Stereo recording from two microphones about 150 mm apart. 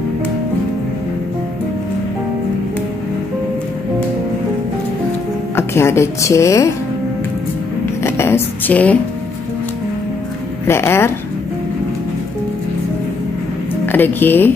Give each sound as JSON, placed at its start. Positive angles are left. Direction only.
{"t": 5.6, "sound": "a woman's voice", "side_deg": 15}
{"t": 8.0, "sound": "a sound", "side_deg": 15}
{"t": 10.7, "sound": "speech", "side_deg": 15}
{"t": 13.8, "sound": "speech", "side_deg": 15}